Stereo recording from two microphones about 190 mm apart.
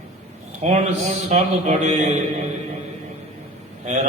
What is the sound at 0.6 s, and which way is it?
Mantra, 35° right (ahead or behind).